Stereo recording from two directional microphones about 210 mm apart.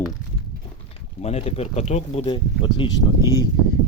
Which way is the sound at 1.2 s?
30° left (ahead or behind).